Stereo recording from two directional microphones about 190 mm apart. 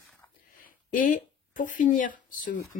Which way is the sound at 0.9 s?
45° left (ahead or behind).